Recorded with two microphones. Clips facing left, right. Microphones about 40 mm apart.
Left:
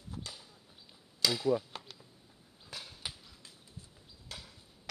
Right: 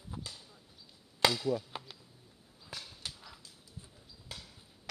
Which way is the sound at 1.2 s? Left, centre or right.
Right.